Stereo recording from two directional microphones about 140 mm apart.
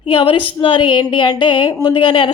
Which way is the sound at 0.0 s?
40° left (ahead or behind).